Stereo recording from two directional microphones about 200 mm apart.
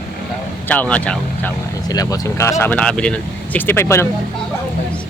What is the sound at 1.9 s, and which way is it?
Speech, 20° left (ahead or behind).